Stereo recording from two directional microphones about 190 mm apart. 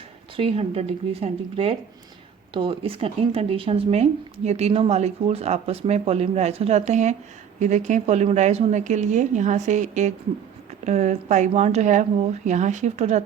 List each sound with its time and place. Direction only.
0.3 s speech: 30° right (ahead or behind)